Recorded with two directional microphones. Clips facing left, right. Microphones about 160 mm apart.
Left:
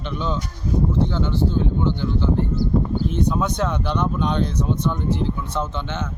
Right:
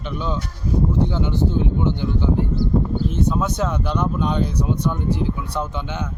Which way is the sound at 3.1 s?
5° right (ahead or behind).